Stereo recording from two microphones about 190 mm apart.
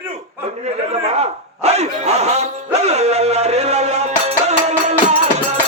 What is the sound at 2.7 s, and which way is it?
Music, 35° right (ahead or behind).